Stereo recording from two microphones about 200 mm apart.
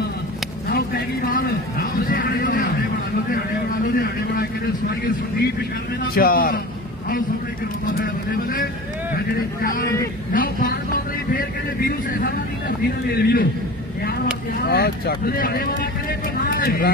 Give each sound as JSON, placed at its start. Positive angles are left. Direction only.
{"t": 0.7, "sound": "a sound", "side_deg": 50}
{"t": 3.8, "sound": "vehicle", "side_deg": 45}
{"t": 6.1, "sound": "a man's voice", "side_deg": 50}
{"t": 7.9, "sound": "a man's voice", "side_deg": 45}
{"t": 14.6, "sound": "a man's voice", "side_deg": 50}
{"t": 16.3, "sound": "a sound", "side_deg": 45}